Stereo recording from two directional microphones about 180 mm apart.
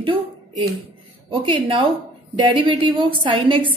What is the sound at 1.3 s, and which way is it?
A woman's voice, 30° right (ahead or behind).